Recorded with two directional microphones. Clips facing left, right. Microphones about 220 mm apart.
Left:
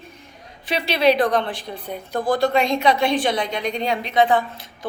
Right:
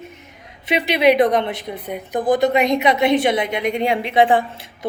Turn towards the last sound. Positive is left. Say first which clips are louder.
# right 2 dB
turn(degrees=-25)  # may be behind; listen again after turning